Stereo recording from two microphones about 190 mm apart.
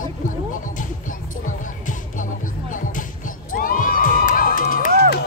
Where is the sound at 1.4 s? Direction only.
40° left (ahead or behind).